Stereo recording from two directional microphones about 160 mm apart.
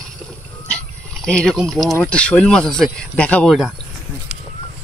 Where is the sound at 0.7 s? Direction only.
5° left (ahead or behind).